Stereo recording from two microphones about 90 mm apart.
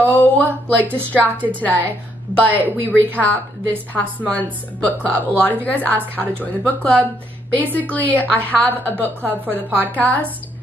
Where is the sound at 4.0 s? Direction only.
15° left (ahead or behind).